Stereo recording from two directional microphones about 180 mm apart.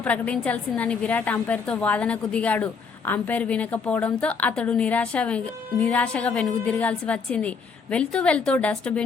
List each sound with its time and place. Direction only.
0.0 s a woman's voice: 5° left (ahead or behind)